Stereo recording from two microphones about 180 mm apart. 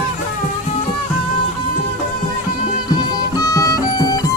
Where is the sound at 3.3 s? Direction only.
20° left (ahead or behind).